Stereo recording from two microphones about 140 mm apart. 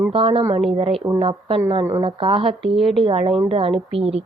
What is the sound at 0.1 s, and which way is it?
A woman's voice, 40° right (ahead or behind).